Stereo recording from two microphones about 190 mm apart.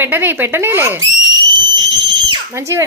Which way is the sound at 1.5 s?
20° right (ahead or behind).